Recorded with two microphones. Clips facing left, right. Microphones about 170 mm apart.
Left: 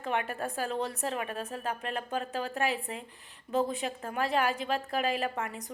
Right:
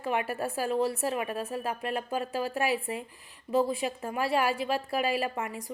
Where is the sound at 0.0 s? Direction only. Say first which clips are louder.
Right 2 dB; 5° right (ahead or behind).